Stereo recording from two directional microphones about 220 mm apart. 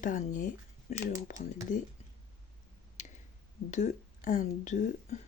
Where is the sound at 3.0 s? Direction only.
30° left (ahead or behind).